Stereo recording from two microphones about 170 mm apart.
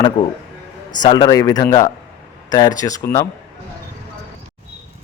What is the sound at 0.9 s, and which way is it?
A man's voice, 25° left (ahead or behind).